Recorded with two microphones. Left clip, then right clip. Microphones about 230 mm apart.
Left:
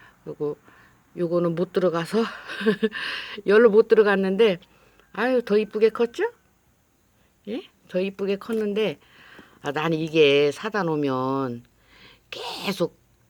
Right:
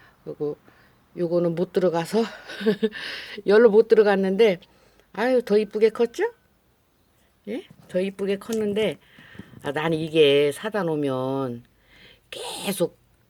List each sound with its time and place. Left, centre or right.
0.0 s speech: centre
7.4 s speech: centre